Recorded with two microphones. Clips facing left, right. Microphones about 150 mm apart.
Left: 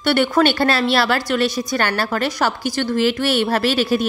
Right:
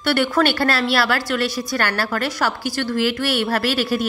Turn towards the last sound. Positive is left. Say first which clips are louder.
# left 3 dB
turn(degrees=20)  # may be behind; listen again after turning